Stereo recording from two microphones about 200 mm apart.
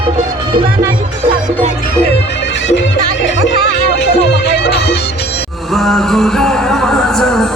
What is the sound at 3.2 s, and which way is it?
Music, 65° left (ahead or behind).